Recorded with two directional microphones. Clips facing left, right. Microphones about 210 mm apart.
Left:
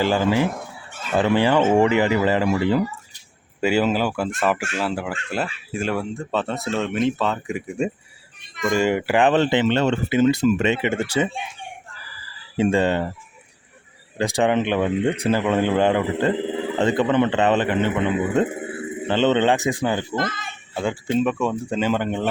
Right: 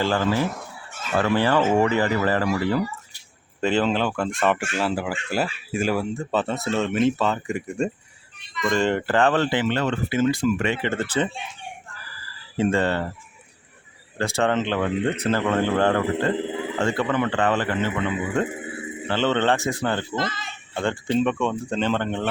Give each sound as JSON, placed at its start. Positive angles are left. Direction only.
{"t": 0.0, "sound": "speech", "side_deg": 10}
{"t": 3.6, "sound": "speech", "side_deg": 10}
{"t": 12.5, "sound": "speech", "side_deg": 15}
{"t": 14.2, "sound": "speech", "side_deg": 15}
{"t": 20.1, "sound": "speech", "side_deg": 50}
{"t": 20.7, "sound": "speech", "side_deg": 5}